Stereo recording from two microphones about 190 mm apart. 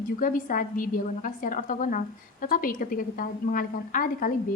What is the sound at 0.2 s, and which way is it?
A woman's voice, 45° left (ahead or behind).